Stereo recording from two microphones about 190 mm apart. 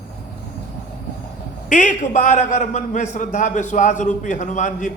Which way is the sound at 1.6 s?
40° left (ahead or behind).